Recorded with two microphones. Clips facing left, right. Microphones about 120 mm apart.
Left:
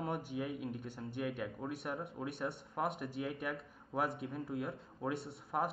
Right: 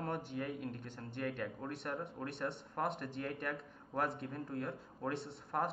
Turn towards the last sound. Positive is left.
turn(degrees=10)  # may be behind; listen again after turning